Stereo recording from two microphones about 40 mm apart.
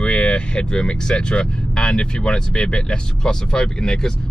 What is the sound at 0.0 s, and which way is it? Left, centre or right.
Speech, left.